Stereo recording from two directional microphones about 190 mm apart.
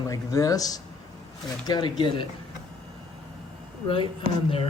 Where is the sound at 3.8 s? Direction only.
25° left (ahead or behind).